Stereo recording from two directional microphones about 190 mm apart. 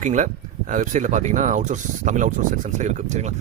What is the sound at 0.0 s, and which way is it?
A man's voice, 40° right (ahead or behind).